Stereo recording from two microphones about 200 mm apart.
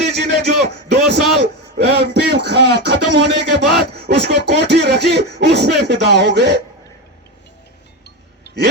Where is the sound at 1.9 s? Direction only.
55° right (ahead or behind).